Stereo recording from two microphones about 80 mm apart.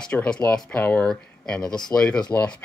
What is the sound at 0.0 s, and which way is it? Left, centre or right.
Speech, centre.